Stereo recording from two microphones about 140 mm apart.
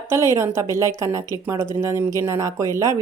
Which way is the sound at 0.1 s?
20° right (ahead or behind).